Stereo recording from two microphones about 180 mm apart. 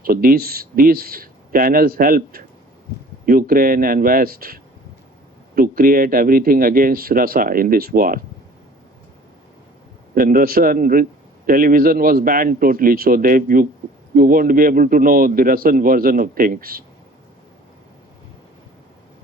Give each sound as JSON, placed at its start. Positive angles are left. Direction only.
{"t": 0.0, "sound": "speech", "side_deg": -55}
{"t": 10.2, "sound": "speech", "side_deg": -50}